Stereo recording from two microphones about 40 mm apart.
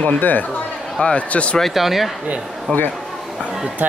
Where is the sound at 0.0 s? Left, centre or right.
Left.